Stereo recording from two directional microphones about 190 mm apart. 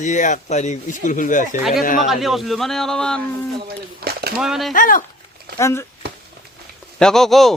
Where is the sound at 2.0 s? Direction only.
Centre (ahead or behind).